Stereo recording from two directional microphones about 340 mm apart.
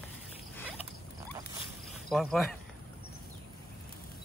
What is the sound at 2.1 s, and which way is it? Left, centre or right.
Speech, centre.